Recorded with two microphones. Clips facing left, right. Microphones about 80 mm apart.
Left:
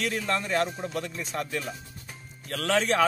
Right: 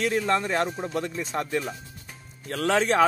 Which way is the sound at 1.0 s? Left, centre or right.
Right.